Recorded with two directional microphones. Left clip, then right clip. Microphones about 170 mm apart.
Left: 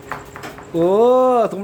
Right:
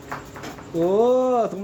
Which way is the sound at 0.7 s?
20° left (ahead or behind).